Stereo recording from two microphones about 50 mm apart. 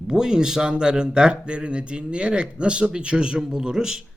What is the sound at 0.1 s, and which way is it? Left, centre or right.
Speech, centre.